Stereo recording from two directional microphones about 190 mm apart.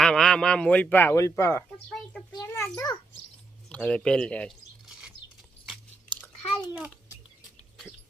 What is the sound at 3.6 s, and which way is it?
Speech, 5° left (ahead or behind).